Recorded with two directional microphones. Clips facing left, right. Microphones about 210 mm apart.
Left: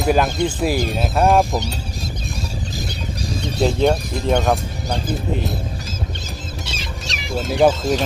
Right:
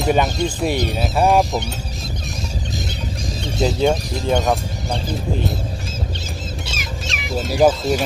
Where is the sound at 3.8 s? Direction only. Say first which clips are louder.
Left 1 dB; centre (ahead or behind).